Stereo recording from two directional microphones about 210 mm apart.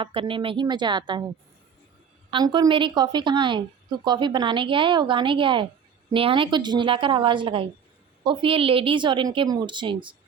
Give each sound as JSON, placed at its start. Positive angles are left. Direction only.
{"t": 0.0, "sound": "a woman's voice", "side_deg": -25}
{"t": 2.3, "sound": "a woman's voice", "side_deg": -20}